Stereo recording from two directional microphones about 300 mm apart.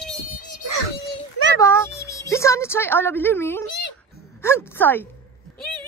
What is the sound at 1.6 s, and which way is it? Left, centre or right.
Speech, centre.